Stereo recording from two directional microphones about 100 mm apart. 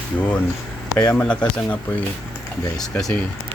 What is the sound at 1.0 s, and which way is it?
Speech, 10° left (ahead or behind).